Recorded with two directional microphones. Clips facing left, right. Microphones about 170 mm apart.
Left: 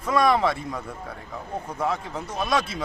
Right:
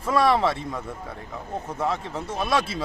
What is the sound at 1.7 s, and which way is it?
Speech, centre (ahead or behind).